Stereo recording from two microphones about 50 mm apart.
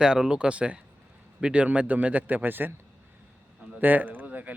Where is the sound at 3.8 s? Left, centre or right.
Right.